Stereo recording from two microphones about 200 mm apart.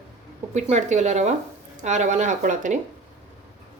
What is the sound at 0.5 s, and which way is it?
Speech, 35° right (ahead or behind).